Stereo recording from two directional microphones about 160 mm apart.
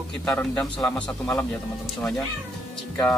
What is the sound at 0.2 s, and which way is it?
A man's voice, 5° left (ahead or behind).